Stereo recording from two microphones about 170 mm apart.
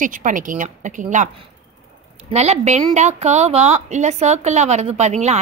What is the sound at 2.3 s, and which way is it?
A woman's voice, 40° right (ahead or behind).